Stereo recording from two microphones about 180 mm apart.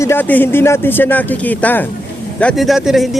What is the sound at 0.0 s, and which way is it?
Speech, 10° left (ahead or behind).